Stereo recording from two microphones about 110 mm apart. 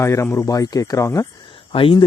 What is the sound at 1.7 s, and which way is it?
Speech, 55° left (ahead or behind).